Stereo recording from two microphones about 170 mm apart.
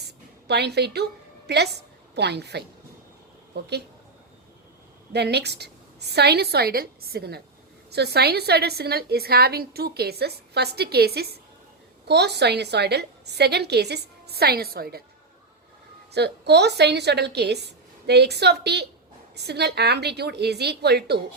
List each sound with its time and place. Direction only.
0.0 s a sound: 75° right (ahead or behind)
1.5 s a woman's voice: 75° right (ahead or behind)
5.1 s a woman's voice: 75° right (ahead or behind)
16.1 s a woman's voice: 75° right (ahead or behind)